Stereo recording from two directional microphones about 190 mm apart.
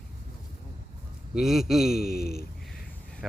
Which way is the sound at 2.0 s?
55° left (ahead or behind).